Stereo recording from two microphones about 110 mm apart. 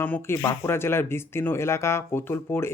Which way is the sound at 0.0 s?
20° left (ahead or behind).